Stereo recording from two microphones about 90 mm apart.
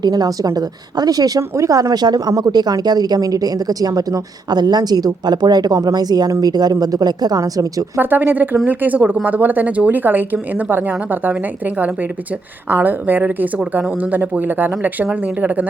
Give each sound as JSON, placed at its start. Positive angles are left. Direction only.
{"t": 0.0, "sound": "a woman's voice", "side_deg": -50}
{"t": 7.9, "sound": "speech", "side_deg": -20}